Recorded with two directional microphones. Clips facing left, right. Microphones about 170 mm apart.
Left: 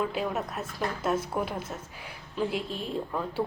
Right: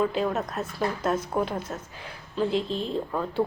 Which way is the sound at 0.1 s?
10° left (ahead or behind).